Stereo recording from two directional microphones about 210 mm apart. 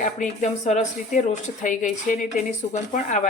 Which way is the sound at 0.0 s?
35° left (ahead or behind).